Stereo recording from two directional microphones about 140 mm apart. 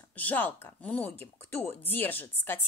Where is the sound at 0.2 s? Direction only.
10° left (ahead or behind).